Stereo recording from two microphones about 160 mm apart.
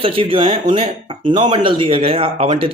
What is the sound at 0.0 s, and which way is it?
A man's voice, 35° right (ahead or behind).